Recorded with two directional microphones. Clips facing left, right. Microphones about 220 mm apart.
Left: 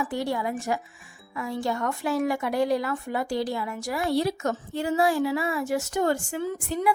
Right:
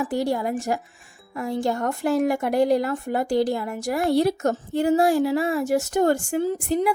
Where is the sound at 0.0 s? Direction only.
40° right (ahead or behind).